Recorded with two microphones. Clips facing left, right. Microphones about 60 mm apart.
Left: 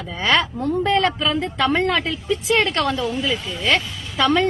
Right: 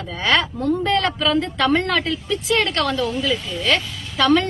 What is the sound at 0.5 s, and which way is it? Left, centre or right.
A woman's voice, left.